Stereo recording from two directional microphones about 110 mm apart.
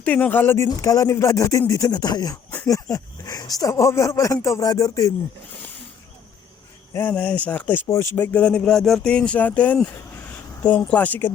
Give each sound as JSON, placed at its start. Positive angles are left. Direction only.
{"t": 0.0, "sound": "speech", "side_deg": 15}
{"t": 6.9, "sound": "speech", "side_deg": 15}